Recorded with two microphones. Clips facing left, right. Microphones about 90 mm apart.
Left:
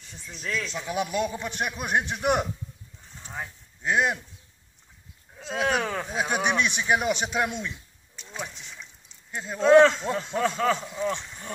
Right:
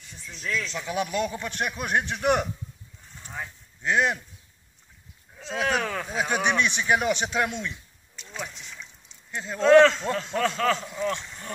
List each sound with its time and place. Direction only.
0.7 s speech: 15° left (ahead or behind)
3.2 s a sound: 35° left (ahead or behind)
3.8 s speech: 10° left (ahead or behind)
5.5 s speech: 25° left (ahead or behind)
8.2 s rowboat: 20° left (ahead or behind)
9.3 s speech: 10° left (ahead or behind)